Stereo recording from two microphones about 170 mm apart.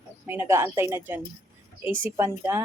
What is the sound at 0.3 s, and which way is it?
Speech, 15° right (ahead or behind).